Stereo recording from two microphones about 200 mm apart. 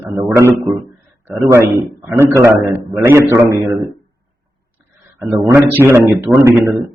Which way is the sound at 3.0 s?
15° right (ahead or behind).